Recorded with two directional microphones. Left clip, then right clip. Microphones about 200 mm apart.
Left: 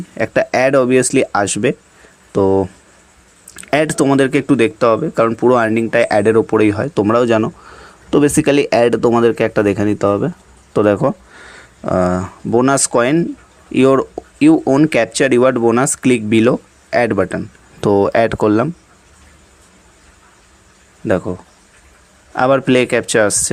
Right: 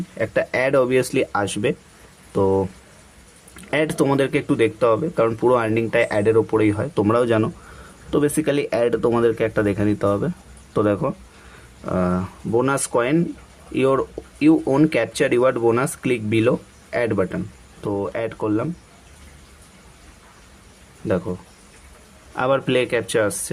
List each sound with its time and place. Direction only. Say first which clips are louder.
0.1 s speech: left 6 dB; 30° left (ahead or behind)
3.7 s speech: left 6 dB; 30° left (ahead or behind)
22.4 s speech: left 7 dB; 25° left (ahead or behind)